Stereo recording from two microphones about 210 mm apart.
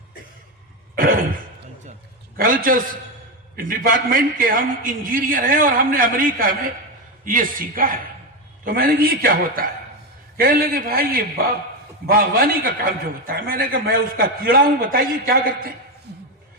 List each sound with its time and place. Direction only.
0.9 s cough: 40° right (ahead or behind)
2.4 s a man's voice: 40° right (ahead or behind)
16.1 s a sound: 50° right (ahead or behind)